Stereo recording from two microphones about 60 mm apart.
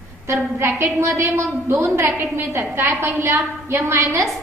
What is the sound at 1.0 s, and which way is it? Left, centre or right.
Speech, right.